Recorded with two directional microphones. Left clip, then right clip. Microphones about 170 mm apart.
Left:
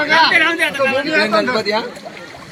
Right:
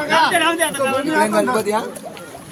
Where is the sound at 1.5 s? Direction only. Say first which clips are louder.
Left 1 dB; 50° right (ahead or behind).